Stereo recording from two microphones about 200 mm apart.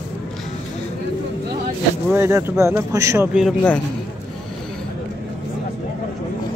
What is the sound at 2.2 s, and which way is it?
Speech, 15° right (ahead or behind).